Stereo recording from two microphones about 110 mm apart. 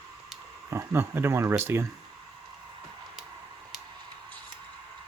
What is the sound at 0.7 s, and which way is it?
Speech, 25° right (ahead or behind).